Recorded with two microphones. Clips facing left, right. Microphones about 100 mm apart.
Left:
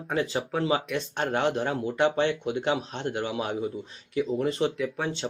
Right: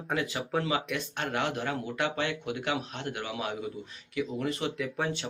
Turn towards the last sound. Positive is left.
turn(degrees=0)  # may be behind; listen again after turning